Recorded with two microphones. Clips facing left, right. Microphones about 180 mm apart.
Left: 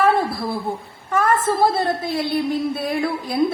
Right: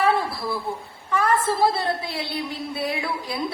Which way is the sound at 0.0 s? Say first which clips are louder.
Left 4 dB; 50° left (ahead or behind).